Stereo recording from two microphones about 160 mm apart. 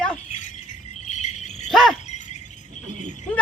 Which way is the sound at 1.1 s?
45° left (ahead or behind).